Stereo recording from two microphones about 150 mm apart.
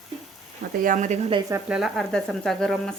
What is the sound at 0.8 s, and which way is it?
Speech, 60° right (ahead or behind).